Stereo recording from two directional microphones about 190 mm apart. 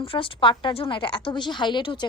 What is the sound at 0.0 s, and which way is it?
Speech, 30° left (ahead or behind).